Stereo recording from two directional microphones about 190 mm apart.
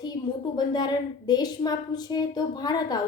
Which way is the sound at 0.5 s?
20° left (ahead or behind).